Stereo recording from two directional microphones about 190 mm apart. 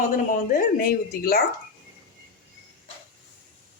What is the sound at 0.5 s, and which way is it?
Speech, 50° left (ahead or behind).